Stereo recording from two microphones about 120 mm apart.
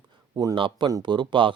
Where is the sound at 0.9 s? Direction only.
35° right (ahead or behind).